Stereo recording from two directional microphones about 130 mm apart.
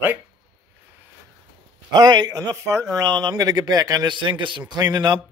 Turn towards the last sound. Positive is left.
turn(degrees=-30)  # may be behind; listen again after turning